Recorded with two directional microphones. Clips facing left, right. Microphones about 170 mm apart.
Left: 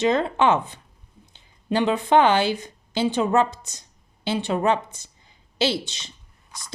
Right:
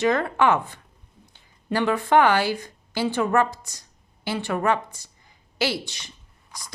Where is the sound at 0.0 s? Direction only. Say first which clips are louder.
Left 1 dB; 20° left (ahead or behind).